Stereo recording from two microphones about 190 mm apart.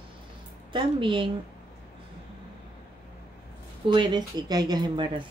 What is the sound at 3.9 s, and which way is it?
Speech, 25° right (ahead or behind).